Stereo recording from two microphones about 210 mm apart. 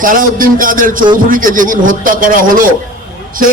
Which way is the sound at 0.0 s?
40° right (ahead or behind).